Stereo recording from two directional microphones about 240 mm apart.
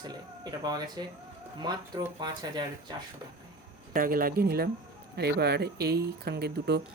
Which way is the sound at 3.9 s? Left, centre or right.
Right.